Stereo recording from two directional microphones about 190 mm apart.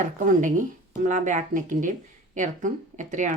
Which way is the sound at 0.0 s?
40° right (ahead or behind).